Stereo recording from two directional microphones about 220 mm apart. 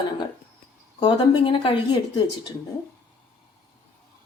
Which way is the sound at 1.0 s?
20° left (ahead or behind).